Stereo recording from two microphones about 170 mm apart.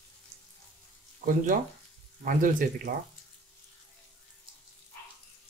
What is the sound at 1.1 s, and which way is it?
Speech, 55° right (ahead or behind).